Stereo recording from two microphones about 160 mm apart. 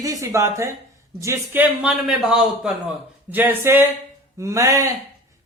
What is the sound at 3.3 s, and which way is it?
Speech, 10° right (ahead or behind).